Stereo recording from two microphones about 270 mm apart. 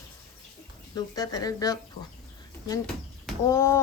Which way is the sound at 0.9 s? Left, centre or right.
Centre.